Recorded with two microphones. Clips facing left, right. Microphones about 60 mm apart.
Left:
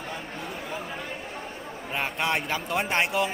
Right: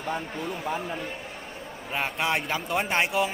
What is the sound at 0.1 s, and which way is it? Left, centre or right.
Speech, right.